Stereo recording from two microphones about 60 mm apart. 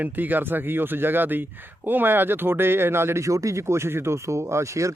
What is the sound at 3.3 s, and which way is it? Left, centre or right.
Speech, right.